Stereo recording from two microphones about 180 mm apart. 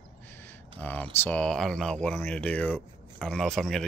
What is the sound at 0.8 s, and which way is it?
Speech, 10° left (ahead or behind).